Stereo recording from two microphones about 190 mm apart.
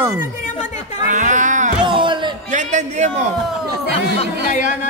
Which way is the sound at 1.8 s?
25° right (ahead or behind).